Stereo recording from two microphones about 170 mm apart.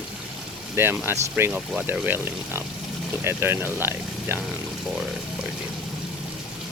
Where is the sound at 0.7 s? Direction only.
10° right (ahead or behind).